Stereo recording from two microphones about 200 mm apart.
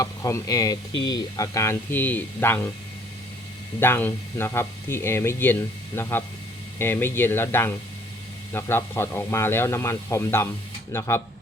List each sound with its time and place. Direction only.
0.0 s speech: 15° left (ahead or behind)
3.8 s speech: 10° left (ahead or behind)